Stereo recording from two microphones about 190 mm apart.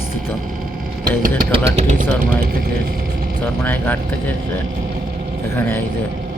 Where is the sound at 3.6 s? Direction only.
10° left (ahead or behind).